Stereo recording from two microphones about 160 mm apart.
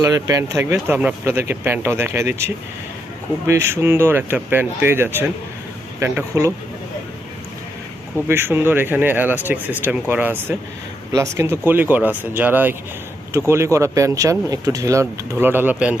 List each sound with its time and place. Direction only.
0.0 s speech: 20° right (ahead or behind)
8.3 s speech: 15° right (ahead or behind)